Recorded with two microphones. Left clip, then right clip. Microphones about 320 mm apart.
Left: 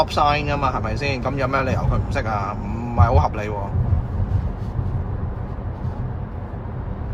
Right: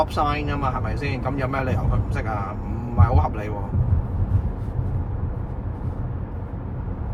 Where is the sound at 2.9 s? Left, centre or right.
Left.